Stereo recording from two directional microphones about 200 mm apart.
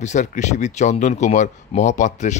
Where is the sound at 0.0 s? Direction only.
35° left (ahead or behind).